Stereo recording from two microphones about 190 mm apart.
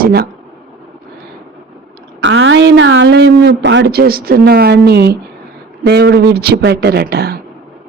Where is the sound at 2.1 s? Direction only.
80° right.